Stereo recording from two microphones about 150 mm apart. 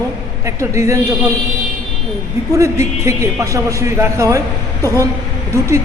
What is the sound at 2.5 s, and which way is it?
A woman's voice, 20° right (ahead or behind).